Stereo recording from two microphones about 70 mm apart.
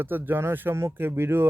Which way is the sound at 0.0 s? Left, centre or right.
Right.